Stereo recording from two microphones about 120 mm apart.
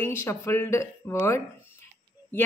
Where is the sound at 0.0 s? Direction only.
25° left (ahead or behind).